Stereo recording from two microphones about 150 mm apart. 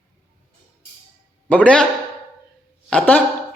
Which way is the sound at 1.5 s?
10° left (ahead or behind).